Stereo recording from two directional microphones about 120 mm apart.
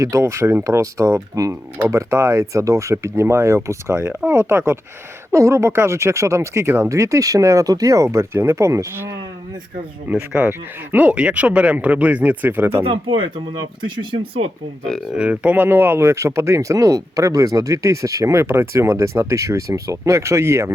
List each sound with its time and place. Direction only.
0.0 s speech: 25° right (ahead or behind)
3.9 s speech: 15° right (ahead or behind)
10.1 s speech: 10° right (ahead or behind)
12.8 s speech: 50° right (ahead or behind)
15.1 s speech: 10° right (ahead or behind)